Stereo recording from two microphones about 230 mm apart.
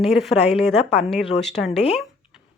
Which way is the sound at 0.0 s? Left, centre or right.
Centre.